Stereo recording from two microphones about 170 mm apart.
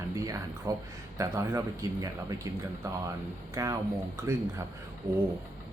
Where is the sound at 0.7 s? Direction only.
20° right (ahead or behind).